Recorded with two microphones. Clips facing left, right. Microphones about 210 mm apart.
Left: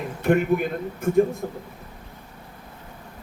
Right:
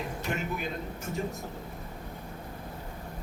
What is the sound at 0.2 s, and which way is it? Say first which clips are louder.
A man's voice: left 16 dB; 55° left (ahead or behind).